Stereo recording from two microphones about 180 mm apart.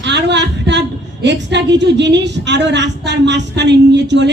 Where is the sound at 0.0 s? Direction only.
75° right (ahead or behind).